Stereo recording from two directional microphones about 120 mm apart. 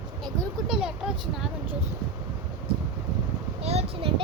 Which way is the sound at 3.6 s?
55° right (ahead or behind).